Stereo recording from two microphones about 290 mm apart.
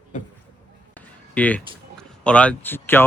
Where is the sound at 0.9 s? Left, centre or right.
Centre.